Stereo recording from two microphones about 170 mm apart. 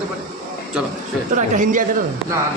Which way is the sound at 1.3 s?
50° right (ahead or behind).